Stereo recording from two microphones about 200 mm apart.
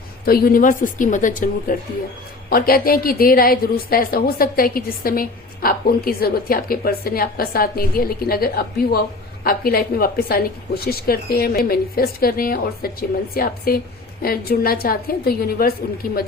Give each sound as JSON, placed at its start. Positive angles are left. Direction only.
{"t": 0.3, "sound": "a woman's voice", "side_deg": 50}